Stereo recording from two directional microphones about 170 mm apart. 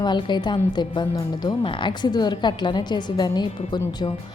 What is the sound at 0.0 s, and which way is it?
Speech, 25° left (ahead or behind).